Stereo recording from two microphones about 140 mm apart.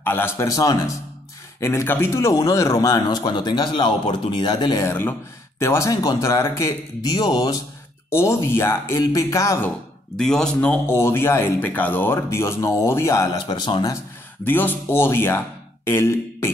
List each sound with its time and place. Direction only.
0.0 s a man's voice: 15° left (ahead or behind); by 4.8 s 30° left (ahead or behind)
4.8 s a man's voice: 15° left (ahead or behind)
10.1 s a man's voice: 5° left (ahead or behind); by 13.9 s 35° left (ahead or behind)
14.4 s speech: 15° left (ahead or behind)